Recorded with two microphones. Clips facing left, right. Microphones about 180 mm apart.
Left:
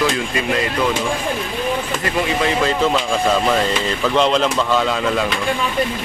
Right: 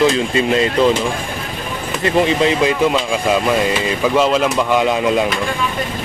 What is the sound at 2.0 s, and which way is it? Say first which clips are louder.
Speech: right 8 dB; 20° right (ahead or behind).